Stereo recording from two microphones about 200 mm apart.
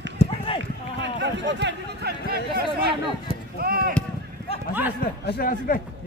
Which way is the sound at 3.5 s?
50° right (ahead or behind).